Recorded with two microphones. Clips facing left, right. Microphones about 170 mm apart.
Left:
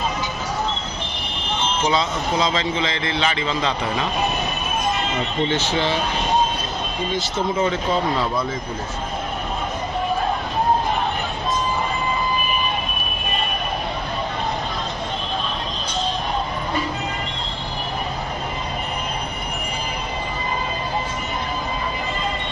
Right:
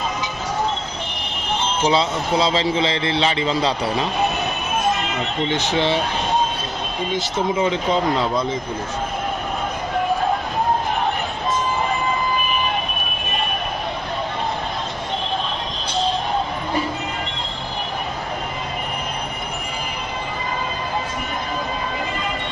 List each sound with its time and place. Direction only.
1.8 s a man's voice: 30° right (ahead or behind)
5.5 s speech: 15° right (ahead or behind)
7.2 s speech: 15° right (ahead or behind)